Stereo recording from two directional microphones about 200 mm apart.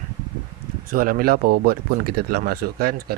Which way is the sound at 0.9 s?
45° right (ahead or behind).